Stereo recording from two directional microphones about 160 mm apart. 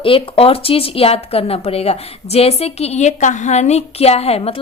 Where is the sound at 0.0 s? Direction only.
35° left (ahead or behind).